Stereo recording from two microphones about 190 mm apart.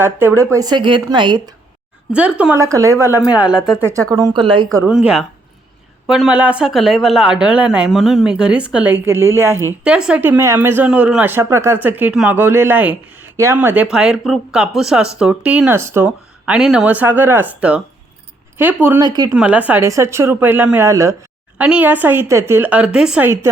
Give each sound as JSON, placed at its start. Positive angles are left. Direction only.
{"t": 0.0, "sound": "speech", "side_deg": -10}
{"t": 2.4, "sound": "speech", "side_deg": -10}
{"t": 6.1, "sound": "speech", "side_deg": -5}
{"t": 19.0, "sound": "speech", "side_deg": -20}
{"t": 19.3, "sound": "speech", "side_deg": -5}